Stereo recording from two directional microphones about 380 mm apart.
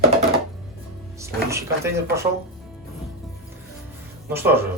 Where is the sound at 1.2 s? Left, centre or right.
Centre.